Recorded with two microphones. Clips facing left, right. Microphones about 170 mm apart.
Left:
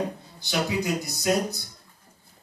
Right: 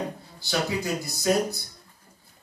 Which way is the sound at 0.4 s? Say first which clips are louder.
Left 1 dB; 20° left (ahead or behind).